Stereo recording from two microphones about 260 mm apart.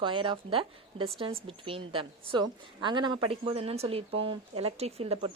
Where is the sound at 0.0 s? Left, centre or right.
Centre.